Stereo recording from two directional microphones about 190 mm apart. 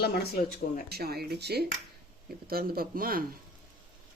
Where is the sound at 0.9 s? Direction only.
55° right (ahead or behind).